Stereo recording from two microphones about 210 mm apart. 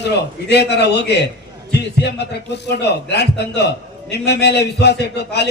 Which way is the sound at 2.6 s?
55° left (ahead or behind).